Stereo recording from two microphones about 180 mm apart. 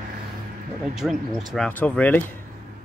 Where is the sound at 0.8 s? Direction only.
Centre (ahead or behind).